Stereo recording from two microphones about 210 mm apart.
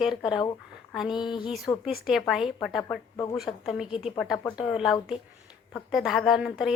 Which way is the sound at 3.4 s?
Centre (ahead or behind).